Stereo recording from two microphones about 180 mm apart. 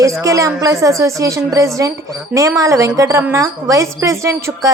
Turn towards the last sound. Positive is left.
turn(degrees=-15)  # may be behind; listen again after turning